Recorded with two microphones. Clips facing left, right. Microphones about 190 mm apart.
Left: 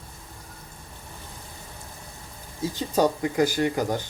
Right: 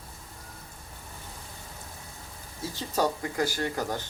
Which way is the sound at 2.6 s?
20° left (ahead or behind).